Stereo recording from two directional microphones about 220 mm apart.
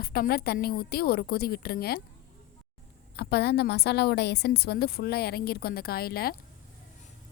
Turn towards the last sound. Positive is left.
turn(degrees=45)  # may be behind; listen again after turning